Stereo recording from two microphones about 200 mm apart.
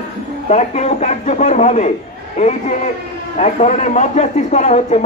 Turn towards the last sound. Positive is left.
turn(degrees=35)  # may be behind; listen again after turning